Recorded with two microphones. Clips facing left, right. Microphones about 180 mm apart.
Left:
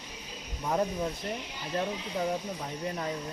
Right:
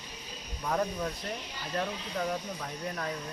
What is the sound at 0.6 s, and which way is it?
Speech, 15° left (ahead or behind).